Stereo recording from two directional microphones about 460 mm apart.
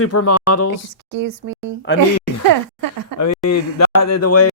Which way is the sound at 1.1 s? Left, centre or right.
Right.